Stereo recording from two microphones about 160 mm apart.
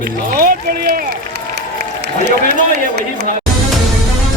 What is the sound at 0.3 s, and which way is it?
Music, 65° right (ahead or behind).